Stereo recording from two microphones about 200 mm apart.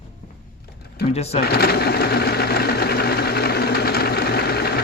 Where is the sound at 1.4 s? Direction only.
50° left (ahead or behind).